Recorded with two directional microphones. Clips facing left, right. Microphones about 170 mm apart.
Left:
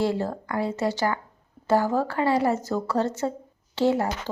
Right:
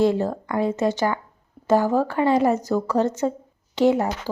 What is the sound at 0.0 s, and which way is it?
A woman's voice, 20° right (ahead or behind).